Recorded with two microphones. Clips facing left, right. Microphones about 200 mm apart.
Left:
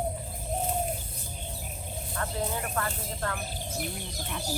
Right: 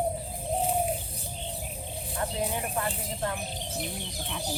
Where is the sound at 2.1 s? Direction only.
15° right (ahead or behind).